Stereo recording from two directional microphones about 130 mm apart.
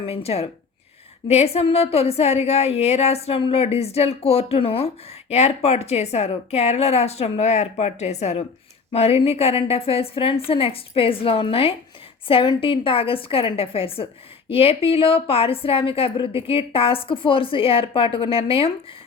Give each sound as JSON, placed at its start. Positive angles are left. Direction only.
{"t": 0.0, "sound": "a woman's voice", "side_deg": 50}